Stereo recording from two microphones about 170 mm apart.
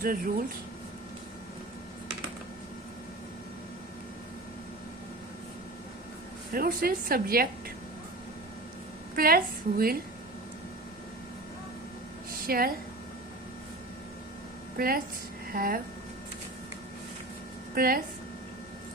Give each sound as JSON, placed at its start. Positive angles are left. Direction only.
{"t": 0.0, "sound": "a woman's voice", "side_deg": -60}
{"t": 6.5, "sound": "a woman's voice", "side_deg": -60}
{"t": 9.1, "sound": "a woman's voice", "side_deg": -60}
{"t": 12.5, "sound": "a woman's voice", "side_deg": -60}
{"t": 14.8, "sound": "a woman's voice", "side_deg": -60}
{"t": 17.7, "sound": "a woman's voice", "side_deg": -60}